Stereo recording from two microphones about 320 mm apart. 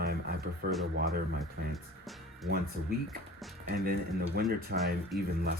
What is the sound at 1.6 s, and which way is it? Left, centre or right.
Speech, right.